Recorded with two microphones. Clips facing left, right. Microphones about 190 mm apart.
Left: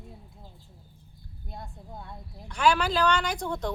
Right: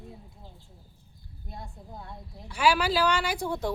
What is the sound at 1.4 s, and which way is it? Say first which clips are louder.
A woman's voice: even; centre (ahead or behind).